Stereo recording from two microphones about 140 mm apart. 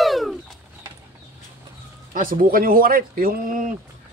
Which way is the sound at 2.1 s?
90° right.